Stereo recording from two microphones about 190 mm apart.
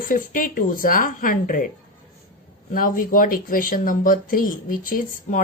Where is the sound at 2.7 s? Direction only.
45° left (ahead or behind).